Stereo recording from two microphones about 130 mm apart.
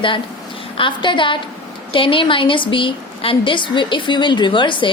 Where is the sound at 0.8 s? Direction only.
40° left (ahead or behind).